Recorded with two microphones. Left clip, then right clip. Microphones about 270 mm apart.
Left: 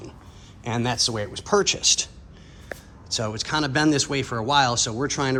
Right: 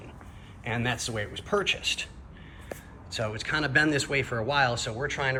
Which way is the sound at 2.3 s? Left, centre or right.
Left.